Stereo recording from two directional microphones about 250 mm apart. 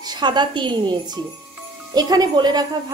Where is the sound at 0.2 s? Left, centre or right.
Centre.